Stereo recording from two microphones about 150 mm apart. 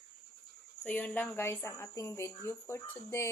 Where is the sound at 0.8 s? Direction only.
10° left (ahead or behind).